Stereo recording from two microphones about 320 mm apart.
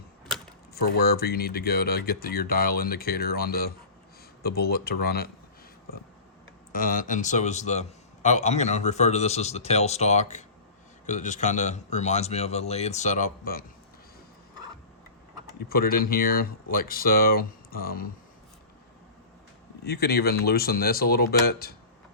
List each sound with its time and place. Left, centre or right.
0.7 s a man's voice: left
6.7 s a man's voice: left
15.7 s a man's voice: left
19.8 s a man's voice: left